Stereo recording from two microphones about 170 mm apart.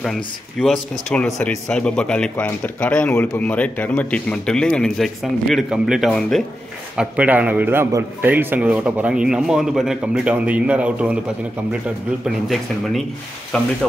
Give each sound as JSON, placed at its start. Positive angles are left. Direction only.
{"t": 0.0, "sound": "speech", "side_deg": 0}
{"t": 7.0, "sound": "a man's voice", "side_deg": -10}
{"t": 13.5, "sound": "speech", "side_deg": 5}